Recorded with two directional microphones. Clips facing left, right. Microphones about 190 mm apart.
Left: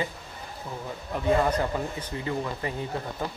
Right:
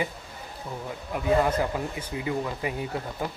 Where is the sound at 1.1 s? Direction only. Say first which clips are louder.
Even; 5° right (ahead or behind).